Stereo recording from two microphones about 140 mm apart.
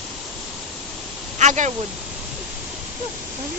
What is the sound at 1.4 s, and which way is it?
Speech, 60° right (ahead or behind).